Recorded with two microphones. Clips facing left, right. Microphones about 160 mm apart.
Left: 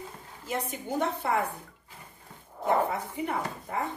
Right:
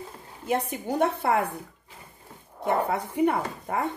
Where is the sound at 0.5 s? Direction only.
65° right (ahead or behind).